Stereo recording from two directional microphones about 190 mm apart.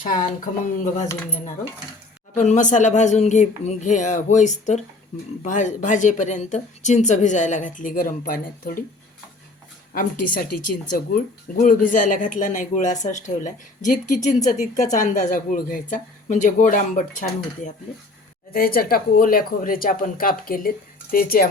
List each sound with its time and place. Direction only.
0.1 s speech: 45° left (ahead or behind)
2.3 s a woman's voice: 40° left (ahead or behind)
9.9 s speech: 45° left (ahead or behind)